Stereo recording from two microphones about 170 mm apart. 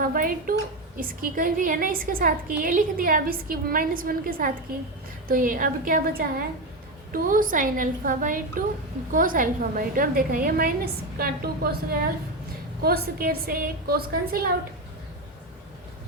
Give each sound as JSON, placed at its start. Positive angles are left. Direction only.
{"t": 0.0, "sound": "a woman's voice", "side_deg": -55}